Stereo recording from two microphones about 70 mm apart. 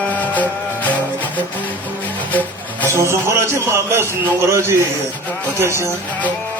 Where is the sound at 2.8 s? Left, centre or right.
Right.